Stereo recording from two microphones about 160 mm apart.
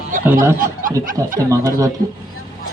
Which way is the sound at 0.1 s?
60° right (ahead or behind).